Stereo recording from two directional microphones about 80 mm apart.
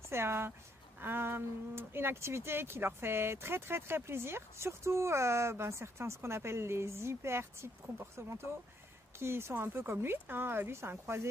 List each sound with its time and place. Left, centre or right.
0.1 s speech: right